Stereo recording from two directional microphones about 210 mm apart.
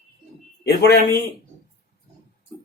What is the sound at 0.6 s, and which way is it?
Speech, 50° left (ahead or behind).